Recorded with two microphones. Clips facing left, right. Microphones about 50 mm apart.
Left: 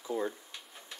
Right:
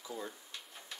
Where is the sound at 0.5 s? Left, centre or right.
Centre.